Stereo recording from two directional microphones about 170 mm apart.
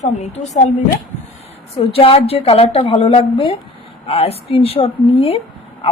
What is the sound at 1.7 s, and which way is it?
A woman's voice, 35° left (ahead or behind).